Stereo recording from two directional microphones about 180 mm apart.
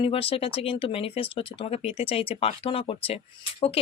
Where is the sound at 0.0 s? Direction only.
30° left (ahead or behind).